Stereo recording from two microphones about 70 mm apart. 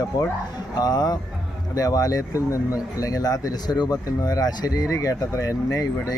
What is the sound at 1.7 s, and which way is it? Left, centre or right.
Speech, left.